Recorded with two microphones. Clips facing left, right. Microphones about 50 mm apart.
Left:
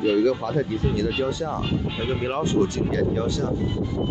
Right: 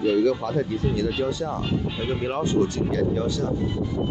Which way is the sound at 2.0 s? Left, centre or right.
Left.